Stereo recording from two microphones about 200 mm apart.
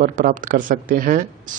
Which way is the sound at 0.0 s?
40° right (ahead or behind).